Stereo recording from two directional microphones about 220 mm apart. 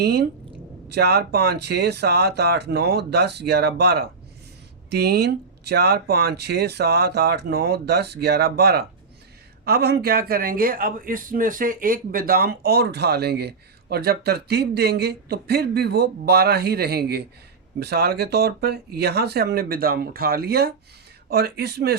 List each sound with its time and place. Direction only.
0.0 s speech: 45° right (ahead or behind)